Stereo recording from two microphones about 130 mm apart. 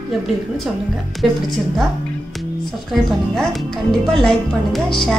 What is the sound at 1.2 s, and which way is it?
Speech, centre (ahead or behind).